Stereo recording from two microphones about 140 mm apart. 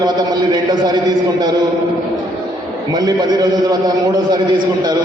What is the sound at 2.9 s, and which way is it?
A man's voice, 30° right (ahead or behind).